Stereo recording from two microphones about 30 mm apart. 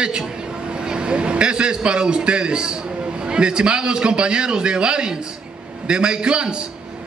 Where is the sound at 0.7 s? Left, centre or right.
Right.